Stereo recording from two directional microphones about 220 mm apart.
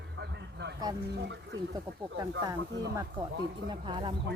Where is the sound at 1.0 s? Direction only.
50° right (ahead or behind).